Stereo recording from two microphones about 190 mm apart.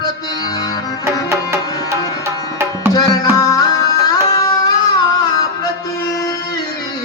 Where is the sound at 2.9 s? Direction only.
20° left (ahead or behind).